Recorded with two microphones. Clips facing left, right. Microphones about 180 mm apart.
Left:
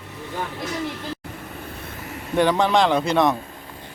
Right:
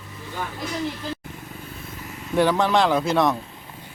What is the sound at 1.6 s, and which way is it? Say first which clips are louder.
Vehicle: left 3 dB; 70° left (ahead or behind).